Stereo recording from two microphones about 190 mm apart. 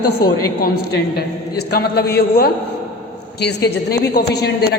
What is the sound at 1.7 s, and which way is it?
A man's voice, 55° left (ahead or behind).